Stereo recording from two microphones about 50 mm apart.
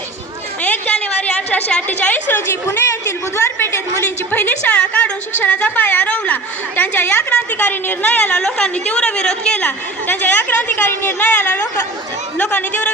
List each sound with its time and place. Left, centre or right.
0.6 s a sound: left
1.9 s a woman's voice: left
2.3 s a woman's voice: left
4.3 s a woman's voice: left
4.8 s a woman's voice: left
5.4 s a woman's voice: left
9.6 s a woman's voice: left
10.8 s a woman's voice: left
11.3 s a woman's voice: left